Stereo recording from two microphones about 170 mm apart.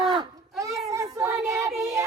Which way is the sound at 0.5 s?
20° right (ahead or behind).